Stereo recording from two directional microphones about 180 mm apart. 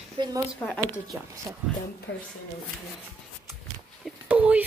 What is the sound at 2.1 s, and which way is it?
Speech, 90° left.